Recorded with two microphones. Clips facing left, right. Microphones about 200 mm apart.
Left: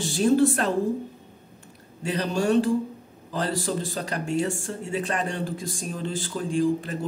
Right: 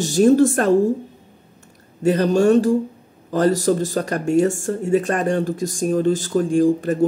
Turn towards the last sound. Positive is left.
turn(degrees=-45)  # may be behind; listen again after turning